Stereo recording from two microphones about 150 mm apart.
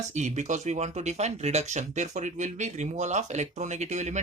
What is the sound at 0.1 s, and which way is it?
Speech, 50° right (ahead or behind).